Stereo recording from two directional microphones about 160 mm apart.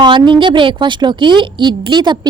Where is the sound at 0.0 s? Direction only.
30° right (ahead or behind).